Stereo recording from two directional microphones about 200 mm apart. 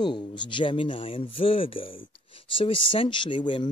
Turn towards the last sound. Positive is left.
turn(degrees=25)  # may be behind; listen again after turning